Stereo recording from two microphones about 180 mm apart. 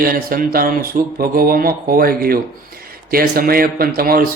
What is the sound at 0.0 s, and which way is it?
Speech, 55° right (ahead or behind).